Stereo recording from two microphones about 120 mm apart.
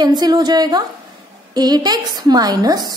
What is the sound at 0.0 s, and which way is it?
A woman's voice, 35° right (ahead or behind).